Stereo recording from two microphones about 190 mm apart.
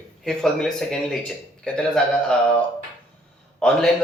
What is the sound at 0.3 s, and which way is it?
Speech, centre (ahead or behind).